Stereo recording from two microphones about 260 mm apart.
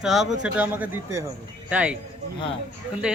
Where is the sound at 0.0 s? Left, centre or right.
Centre.